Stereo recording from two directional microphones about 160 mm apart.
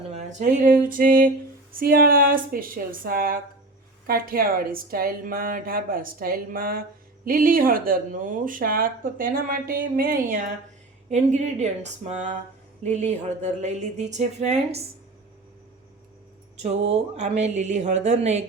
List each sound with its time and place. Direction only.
0.1 s speech: 45° right (ahead or behind); by 10.4 s 60° right (ahead or behind)
11.1 s speech: 45° right (ahead or behind)
16.6 s speech: 45° right (ahead or behind)